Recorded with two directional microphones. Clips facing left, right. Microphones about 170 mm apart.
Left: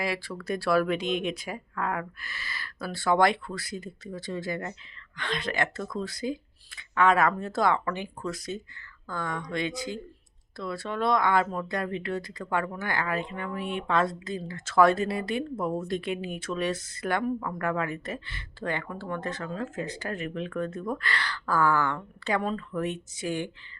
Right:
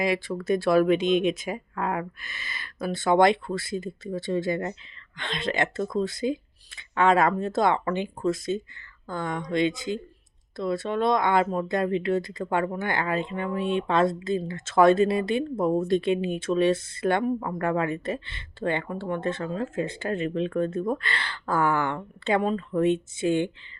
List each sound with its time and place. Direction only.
0.0 s speech: 20° right (ahead or behind)